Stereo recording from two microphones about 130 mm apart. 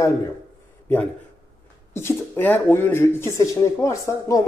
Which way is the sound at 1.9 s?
20° left (ahead or behind).